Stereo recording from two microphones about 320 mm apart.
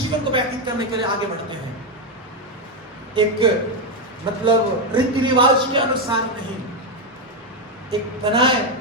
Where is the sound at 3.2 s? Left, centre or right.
Centre.